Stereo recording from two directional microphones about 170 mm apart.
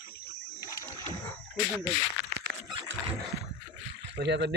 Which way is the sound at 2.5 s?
70° right (ahead or behind).